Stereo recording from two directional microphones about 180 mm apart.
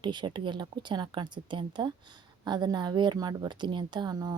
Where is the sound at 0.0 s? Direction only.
25° right (ahead or behind).